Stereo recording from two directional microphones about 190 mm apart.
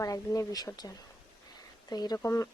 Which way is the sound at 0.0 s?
20° left (ahead or behind).